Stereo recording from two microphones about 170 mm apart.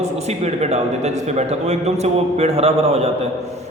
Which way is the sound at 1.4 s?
40° right (ahead or behind).